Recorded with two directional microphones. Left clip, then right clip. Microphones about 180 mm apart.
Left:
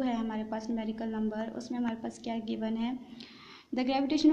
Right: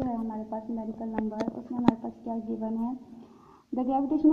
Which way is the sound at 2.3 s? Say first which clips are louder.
Right 2 dB; 15° left (ahead or behind).